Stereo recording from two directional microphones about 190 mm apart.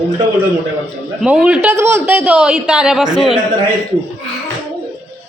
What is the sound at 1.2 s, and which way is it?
Speech, 5° right (ahead or behind).